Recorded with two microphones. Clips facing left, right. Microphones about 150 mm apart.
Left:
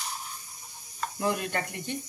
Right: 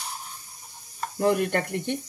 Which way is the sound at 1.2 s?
55° right (ahead or behind).